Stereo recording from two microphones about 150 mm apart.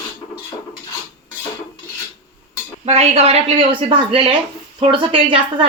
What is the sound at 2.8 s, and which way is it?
A woman's voice, 45° right (ahead or behind).